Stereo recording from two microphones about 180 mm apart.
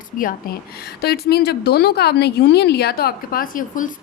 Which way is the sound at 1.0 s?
60° left (ahead or behind).